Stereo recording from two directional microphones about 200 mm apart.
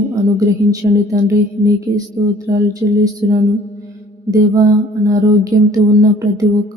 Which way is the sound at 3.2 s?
15° right (ahead or behind).